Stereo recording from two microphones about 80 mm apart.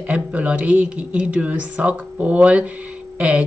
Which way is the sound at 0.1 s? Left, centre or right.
Centre.